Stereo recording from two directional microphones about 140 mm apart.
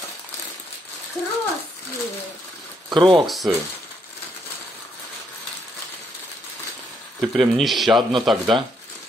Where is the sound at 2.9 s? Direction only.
35° right (ahead or behind).